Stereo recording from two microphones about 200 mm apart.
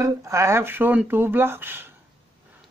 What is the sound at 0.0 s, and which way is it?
Speech, 15° right (ahead or behind).